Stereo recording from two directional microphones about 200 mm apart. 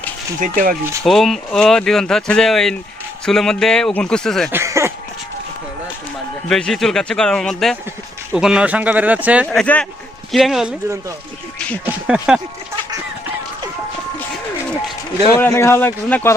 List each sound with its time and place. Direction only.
0.3 s speech: 40° right (ahead or behind)
1.0 s speech: centre (ahead or behind)
4.5 s a sound: 15° right (ahead or behind)
6.5 s speech: centre (ahead or behind)
9.5 s speech: 5° left (ahead or behind)
11.9 s speech: 5° right (ahead or behind)
15.4 s a man's voice: 15° left (ahead or behind)